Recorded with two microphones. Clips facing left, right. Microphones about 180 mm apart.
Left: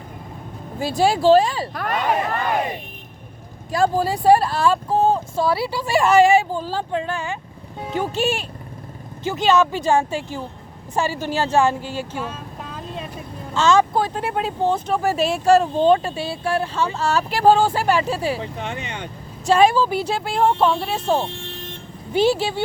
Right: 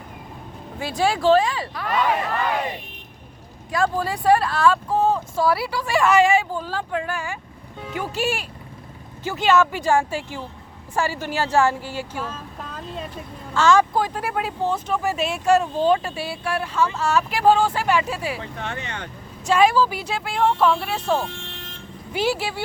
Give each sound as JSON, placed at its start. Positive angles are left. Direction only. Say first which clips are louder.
{"t": 0.8, "sound": "speech", "louder": "left 3 dB", "side_deg": 35}
{"t": 1.7, "sound": "speech", "louder": "right 1 dB", "side_deg": 50}
{"t": 3.8, "sound": "speech", "louder": "left 4 dB", "side_deg": 35}
{"t": 13.5, "sound": "speech", "louder": "left 1 dB", "side_deg": 20}
{"t": 19.5, "sound": "speech", "louder": "left 2 dB", "side_deg": 30}